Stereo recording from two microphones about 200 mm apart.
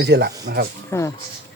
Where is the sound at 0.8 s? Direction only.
15° left (ahead or behind).